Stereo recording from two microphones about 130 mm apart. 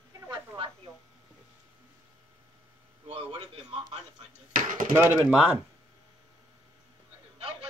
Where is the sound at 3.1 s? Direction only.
50° right (ahead or behind).